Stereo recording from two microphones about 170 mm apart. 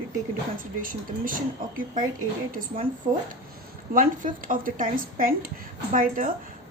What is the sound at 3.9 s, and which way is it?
A woman's voice, 50° right (ahead or behind).